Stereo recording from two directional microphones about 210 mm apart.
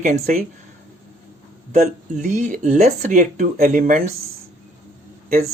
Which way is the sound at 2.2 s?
35° right (ahead or behind).